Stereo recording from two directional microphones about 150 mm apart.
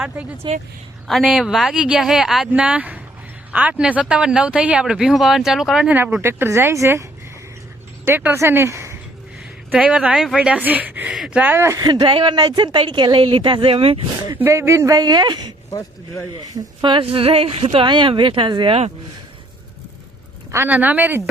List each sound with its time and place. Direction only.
0.4 s a woman's voice: 30° right (ahead or behind)
1.0 s speech: centre (ahead or behind); by 9.0 s 20° right (ahead or behind)
9.4 s speech: 5° right (ahead or behind); by 14.0 s 40° right (ahead or behind)
14.3 s speech: 15° right (ahead or behind)
15.7 s a man's voice: 20° left (ahead or behind)
16.8 s a woman's voice: 35° right (ahead or behind)
20.5 s speech: 15° right (ahead or behind)